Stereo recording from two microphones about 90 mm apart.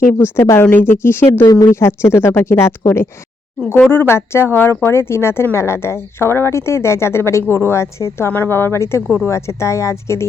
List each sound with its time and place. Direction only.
0.0 s a woman's voice: 25° left (ahead or behind)